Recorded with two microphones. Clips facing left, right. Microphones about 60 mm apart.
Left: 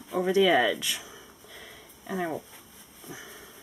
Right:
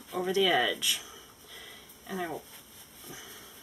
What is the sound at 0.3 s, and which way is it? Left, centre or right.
Speech, left.